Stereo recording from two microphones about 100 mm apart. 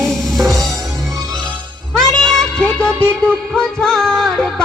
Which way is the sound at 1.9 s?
5° left (ahead or behind).